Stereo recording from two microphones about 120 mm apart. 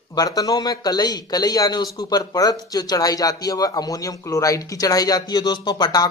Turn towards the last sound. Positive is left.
turn(degrees=35)  # may be behind; listen again after turning